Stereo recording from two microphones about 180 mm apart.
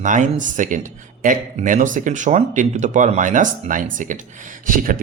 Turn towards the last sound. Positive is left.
turn(degrees=-50)  # may be behind; listen again after turning